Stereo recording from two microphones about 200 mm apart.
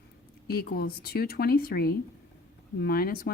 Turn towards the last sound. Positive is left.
turn(degrees=50)  # may be behind; listen again after turning